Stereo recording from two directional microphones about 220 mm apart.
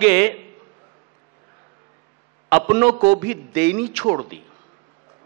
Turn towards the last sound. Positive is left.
turn(degrees=-10)  # may be behind; listen again after turning